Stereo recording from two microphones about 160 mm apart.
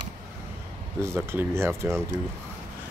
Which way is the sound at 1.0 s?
15° right (ahead or behind).